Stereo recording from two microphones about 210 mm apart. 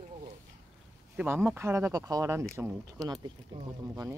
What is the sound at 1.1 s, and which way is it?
Speech, 10° right (ahead or behind).